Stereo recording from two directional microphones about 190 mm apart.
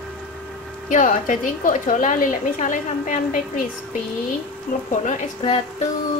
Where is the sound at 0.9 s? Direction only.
40° left (ahead or behind).